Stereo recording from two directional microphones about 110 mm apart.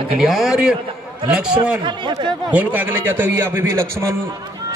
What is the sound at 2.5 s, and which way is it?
A man's voice, 15° right (ahead or behind).